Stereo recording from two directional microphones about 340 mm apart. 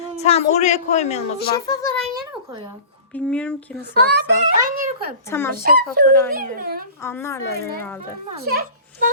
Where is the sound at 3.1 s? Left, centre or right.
Centre.